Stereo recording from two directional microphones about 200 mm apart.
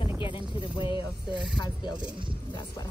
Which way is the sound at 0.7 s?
25° left (ahead or behind).